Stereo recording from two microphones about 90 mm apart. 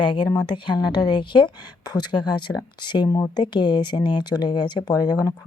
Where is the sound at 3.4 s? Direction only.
55° left (ahead or behind).